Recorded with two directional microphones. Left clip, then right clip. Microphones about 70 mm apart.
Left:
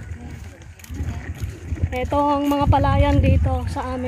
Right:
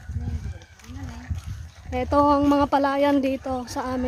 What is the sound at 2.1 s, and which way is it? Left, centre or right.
Speech, right.